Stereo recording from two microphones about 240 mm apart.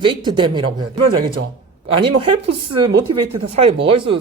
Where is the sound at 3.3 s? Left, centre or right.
Right.